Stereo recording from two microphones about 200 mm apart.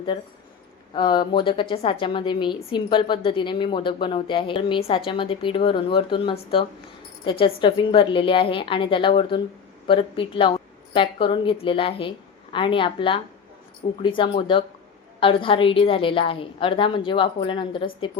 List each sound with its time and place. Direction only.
0.1 s a woman's voice: 25° left (ahead or behind)